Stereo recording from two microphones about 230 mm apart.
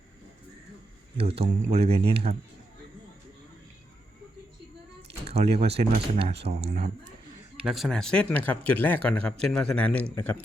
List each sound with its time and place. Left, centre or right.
1.1 s speech: right
5.2 s speech: right
7.6 s speech: centre